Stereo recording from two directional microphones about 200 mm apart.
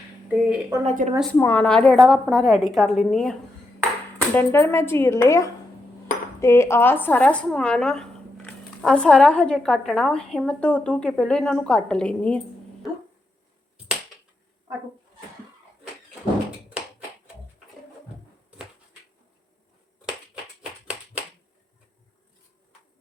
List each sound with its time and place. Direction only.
0.3 s a woman's voice: 5° right (ahead or behind)
0.9 s a woman's voice: 35° right (ahead or behind)
1.4 s speech: 10° left (ahead or behind)
4.4 s speech: 10° left (ahead or behind)